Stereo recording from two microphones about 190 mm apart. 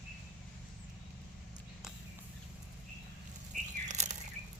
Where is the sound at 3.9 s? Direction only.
40° right (ahead or behind).